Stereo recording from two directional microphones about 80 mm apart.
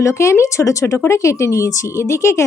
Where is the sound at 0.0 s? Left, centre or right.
Left.